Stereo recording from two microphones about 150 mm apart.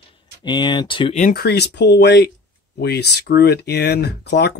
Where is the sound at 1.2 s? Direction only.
75° left (ahead or behind).